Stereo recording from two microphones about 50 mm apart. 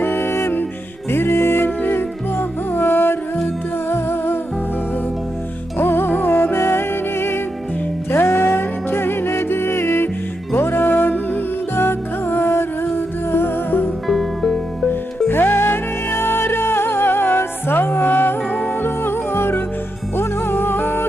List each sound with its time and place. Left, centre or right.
0.0 s music: left
5.7 s music: left
14.1 s music: centre
15.3 s music: left